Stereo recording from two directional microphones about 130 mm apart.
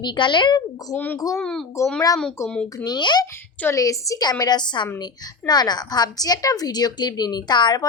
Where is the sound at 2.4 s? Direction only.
20° left (ahead or behind).